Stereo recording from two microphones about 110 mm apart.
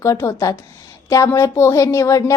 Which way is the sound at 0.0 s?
30° left (ahead or behind).